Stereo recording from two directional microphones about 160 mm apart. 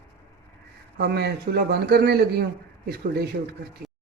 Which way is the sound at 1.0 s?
90° right.